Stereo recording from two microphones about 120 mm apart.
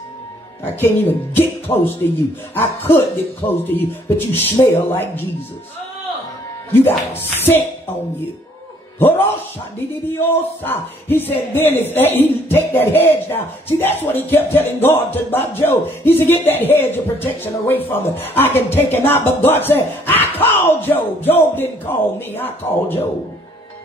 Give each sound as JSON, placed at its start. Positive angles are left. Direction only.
{"t": 0.7, "sound": "a man's voice", "side_deg": 20}
{"t": 6.7, "sound": "speech", "side_deg": 20}
{"t": 9.8, "sound": "speech", "side_deg": 15}